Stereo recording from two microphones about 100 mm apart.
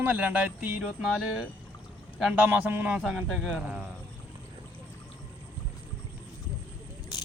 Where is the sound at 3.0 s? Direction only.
Centre (ahead or behind).